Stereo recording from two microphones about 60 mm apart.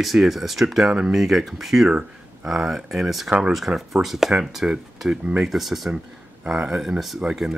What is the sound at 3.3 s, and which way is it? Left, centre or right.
Speech, centre.